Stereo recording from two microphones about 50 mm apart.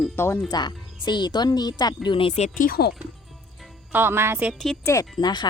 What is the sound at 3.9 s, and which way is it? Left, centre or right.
Speech, right.